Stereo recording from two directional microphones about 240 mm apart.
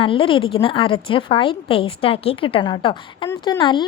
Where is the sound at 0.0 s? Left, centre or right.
Left.